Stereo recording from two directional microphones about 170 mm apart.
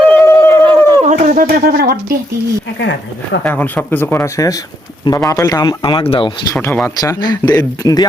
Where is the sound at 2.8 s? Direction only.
90° left.